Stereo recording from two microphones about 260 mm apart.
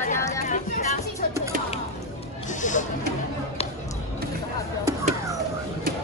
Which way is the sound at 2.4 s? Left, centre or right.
Left.